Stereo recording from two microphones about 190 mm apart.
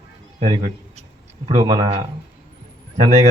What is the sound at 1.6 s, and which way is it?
Speech, 25° right (ahead or behind).